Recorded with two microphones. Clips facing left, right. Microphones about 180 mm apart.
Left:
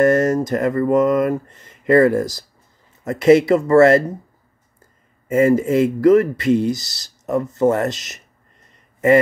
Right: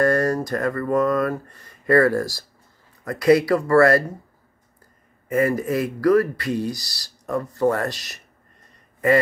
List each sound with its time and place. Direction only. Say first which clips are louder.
0.0 s speech: left 5 dB; 20° left (ahead or behind)
5.3 s speech: left 6 dB; 25° left (ahead or behind)